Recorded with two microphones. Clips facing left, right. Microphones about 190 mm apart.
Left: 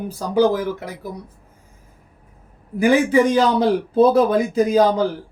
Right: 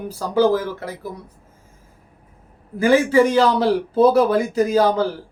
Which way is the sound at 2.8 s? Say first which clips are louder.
Even; 15° left (ahead or behind).